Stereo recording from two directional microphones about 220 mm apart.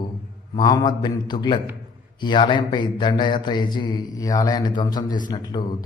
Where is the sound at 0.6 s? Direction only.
20° left (ahead or behind).